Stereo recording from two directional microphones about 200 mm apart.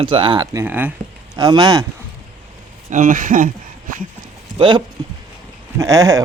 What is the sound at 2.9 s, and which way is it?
Speech, 40° right (ahead or behind).